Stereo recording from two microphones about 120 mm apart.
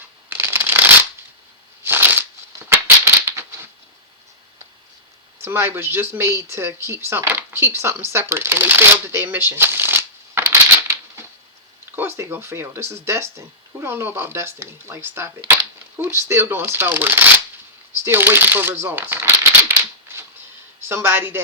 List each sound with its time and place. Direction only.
0.3 s shuffling cards: 20° right (ahead or behind)
1.8 s a sound: 20° right (ahead or behind)
5.4 s speech: 20° right (ahead or behind)
8.1 s shuffling cards: 20° right (ahead or behind)
11.9 s speech: 15° right (ahead or behind)
18.0 s shuffling cards: 20° right (ahead or behind)
20.8 s speech: 20° right (ahead or behind)